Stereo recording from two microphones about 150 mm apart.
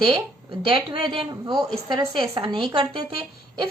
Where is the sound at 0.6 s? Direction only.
35° right (ahead or behind).